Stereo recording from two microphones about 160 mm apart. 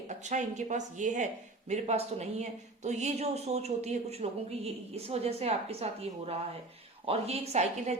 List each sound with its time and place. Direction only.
0.1 s a woman's voice: 50° right (ahead or behind)